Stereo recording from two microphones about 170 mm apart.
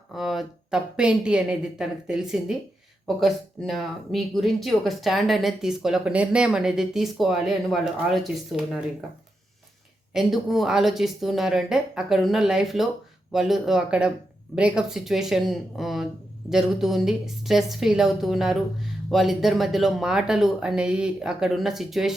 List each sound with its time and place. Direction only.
0.1 s speech: centre (ahead or behind)
10.2 s speech: centre (ahead or behind)